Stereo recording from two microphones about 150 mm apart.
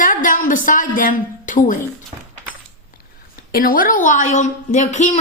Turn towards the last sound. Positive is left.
turn(degrees=50)  # may be behind; listen again after turning